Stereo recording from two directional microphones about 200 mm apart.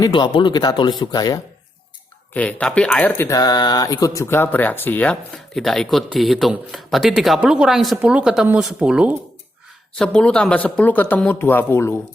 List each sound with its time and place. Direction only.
0.0 s speech: 25° left (ahead or behind)
2.3 s a man's voice: 5° left (ahead or behind)